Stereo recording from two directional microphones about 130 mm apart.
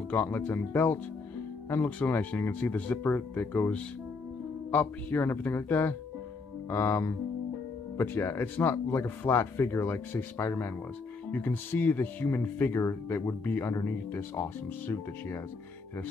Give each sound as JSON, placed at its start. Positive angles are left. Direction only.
{"t": 0.1, "sound": "speech", "side_deg": 15}